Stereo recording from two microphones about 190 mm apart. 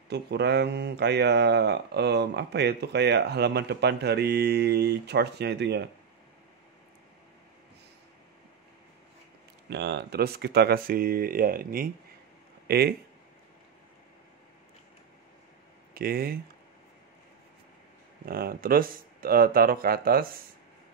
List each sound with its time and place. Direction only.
0.1 s speech: 60° right (ahead or behind)
9.7 s speech: 65° right (ahead or behind)
15.9 s speech: 55° right (ahead or behind)
18.2 s speech: 55° right (ahead or behind)